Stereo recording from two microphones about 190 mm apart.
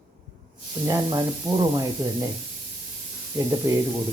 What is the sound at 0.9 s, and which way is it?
Speech, 20° right (ahead or behind).